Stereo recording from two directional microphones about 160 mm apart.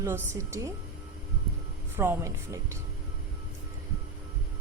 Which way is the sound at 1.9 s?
15° right (ahead or behind).